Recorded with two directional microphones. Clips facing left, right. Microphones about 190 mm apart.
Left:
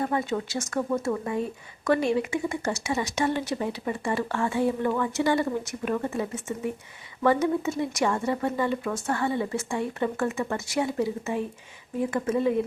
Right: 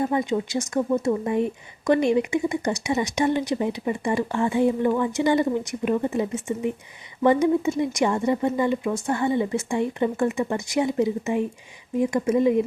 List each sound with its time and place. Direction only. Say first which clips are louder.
0.0 s speech: right 4 dB; 15° right (ahead or behind)